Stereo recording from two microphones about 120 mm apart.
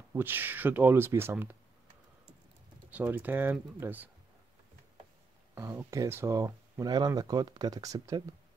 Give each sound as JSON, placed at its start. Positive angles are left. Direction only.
{"t": 0.1, "sound": "speech", "side_deg": -15}
{"t": 2.9, "sound": "speech", "side_deg": -15}
{"t": 5.5, "sound": "speech", "side_deg": -15}